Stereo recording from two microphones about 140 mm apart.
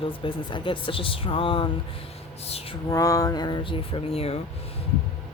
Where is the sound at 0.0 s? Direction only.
35° left (ahead or behind).